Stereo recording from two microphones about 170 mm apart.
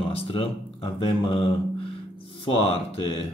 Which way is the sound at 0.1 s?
30° left (ahead or behind).